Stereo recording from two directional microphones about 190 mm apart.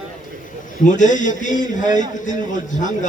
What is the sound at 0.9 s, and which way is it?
A man's voice, 40° left (ahead or behind).